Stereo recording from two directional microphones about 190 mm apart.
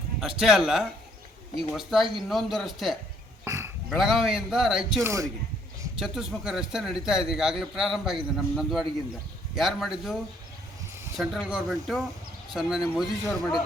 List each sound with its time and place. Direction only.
0.2 s a man's voice: centre (ahead or behind)
3.4 s a sound: 15° right (ahead or behind)
3.8 s a man's voice: centre (ahead or behind)
5.0 s speech: 15° right (ahead or behind)
6.0 s a man's voice: centre (ahead or behind)
11.2 s a man's voice: 5° right (ahead or behind)